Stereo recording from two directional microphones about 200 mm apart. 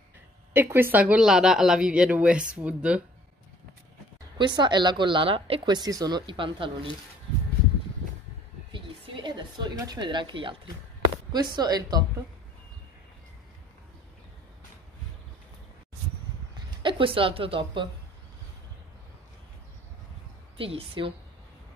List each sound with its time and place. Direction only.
0.5 s speech: 10° right (ahead or behind)
4.4 s speech: 25° right (ahead or behind)
8.7 s a sound: 25° right (ahead or behind)
11.3 s speech: 20° right (ahead or behind)
16.5 s speech: 25° right (ahead or behind)
20.5 s speech: 25° right (ahead or behind)